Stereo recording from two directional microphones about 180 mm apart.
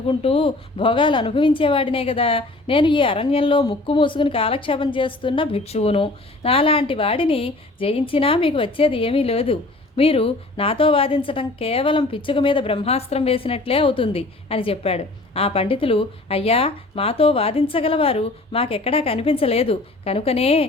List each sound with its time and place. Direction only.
0.1 s a woman's voice: 30° left (ahead or behind)